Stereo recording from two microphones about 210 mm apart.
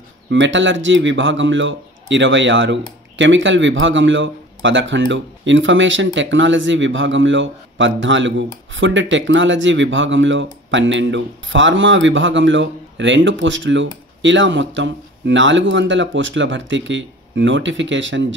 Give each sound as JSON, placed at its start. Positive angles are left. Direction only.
{"t": 0.3, "sound": "a man's voice", "side_deg": -60}